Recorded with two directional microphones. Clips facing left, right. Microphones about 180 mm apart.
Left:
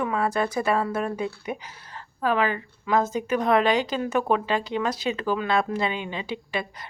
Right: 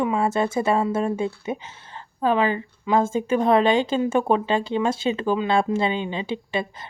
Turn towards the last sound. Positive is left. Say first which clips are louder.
# right 4 dB
turn(degrees=-25)  # may be behind; listen again after turning